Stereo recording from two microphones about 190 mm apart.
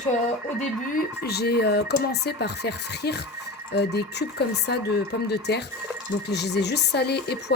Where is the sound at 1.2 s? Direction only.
55° left (ahead or behind).